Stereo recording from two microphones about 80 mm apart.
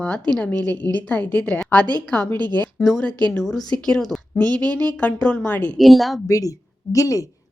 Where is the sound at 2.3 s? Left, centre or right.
Right.